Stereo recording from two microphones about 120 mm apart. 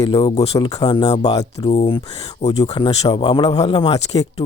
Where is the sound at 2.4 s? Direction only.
65° left (ahead or behind).